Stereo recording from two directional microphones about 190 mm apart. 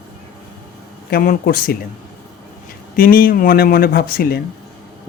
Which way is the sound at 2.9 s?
50° left (ahead or behind).